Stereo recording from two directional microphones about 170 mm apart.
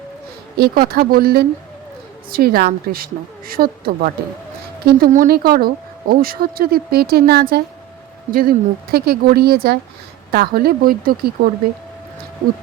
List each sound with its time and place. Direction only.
0.6 s speech: 60° right (ahead or behind)